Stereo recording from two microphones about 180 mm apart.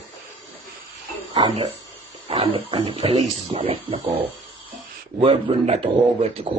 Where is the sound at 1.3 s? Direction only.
25° right (ahead or behind).